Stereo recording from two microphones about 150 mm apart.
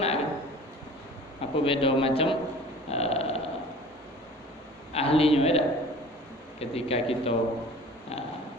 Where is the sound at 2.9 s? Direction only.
45° left (ahead or behind).